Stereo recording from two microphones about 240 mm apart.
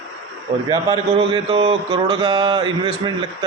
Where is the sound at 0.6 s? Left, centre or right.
Centre.